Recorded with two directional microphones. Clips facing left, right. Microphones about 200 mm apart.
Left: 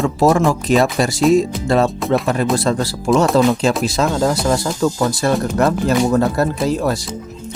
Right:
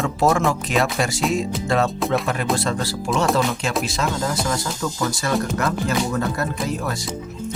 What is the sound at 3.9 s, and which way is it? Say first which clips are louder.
Speech: left 7 dB; 40° left (ahead or behind).